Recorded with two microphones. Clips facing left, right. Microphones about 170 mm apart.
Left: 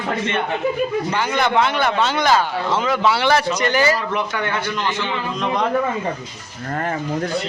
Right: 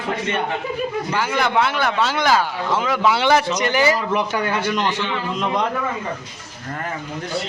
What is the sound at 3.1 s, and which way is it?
Speech, 15° right (ahead or behind).